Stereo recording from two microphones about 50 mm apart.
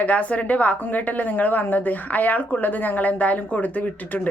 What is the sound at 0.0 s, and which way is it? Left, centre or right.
A woman's voice, left.